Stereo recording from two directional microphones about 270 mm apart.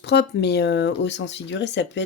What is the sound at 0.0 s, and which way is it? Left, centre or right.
Speech, left.